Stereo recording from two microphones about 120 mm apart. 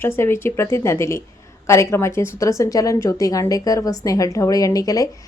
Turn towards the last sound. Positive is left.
turn(degrees=30)  # may be behind; listen again after turning